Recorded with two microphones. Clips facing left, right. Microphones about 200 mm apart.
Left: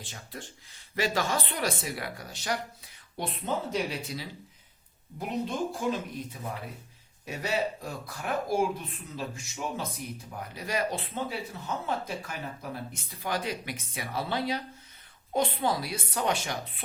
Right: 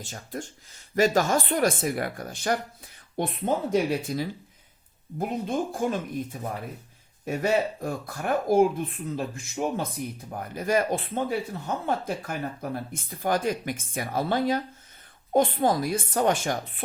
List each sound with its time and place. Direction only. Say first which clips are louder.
0.0 s speech: right 7 dB; 45° right (ahead or behind)
5.5 s speech: right 4 dB; 50° right (ahead or behind)
7.3 s speech: right 6 dB; 50° right (ahead or behind)